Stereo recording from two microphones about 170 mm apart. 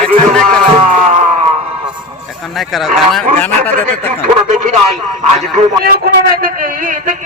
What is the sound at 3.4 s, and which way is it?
Speech, 10° left (ahead or behind).